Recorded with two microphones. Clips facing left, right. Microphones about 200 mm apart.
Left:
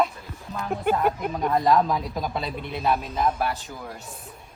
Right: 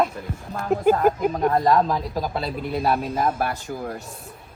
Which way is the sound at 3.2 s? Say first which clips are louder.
Right 1 dB; 50° right (ahead or behind).